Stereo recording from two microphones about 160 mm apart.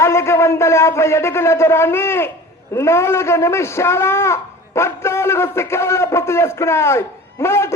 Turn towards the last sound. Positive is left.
turn(degrees=15)  # may be behind; listen again after turning